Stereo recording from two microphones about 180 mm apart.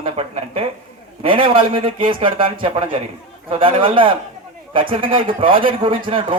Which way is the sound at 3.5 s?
30° right (ahead or behind).